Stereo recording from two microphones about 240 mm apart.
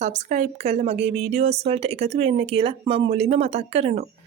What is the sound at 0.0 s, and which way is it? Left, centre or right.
A woman's voice, right.